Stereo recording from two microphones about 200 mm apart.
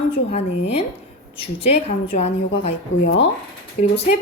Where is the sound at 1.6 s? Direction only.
35° left (ahead or behind).